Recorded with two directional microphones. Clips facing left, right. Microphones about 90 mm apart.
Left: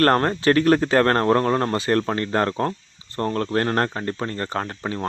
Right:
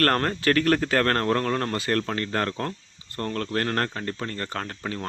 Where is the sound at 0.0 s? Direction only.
25° left (ahead or behind).